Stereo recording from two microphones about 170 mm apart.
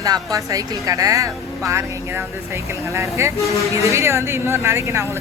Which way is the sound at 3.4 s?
20° left (ahead or behind).